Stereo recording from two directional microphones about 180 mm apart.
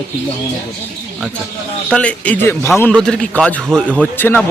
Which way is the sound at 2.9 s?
5° left (ahead or behind).